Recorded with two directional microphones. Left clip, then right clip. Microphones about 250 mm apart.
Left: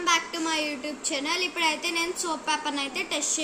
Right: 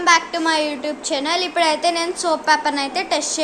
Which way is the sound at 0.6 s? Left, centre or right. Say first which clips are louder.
Right 8 dB; centre.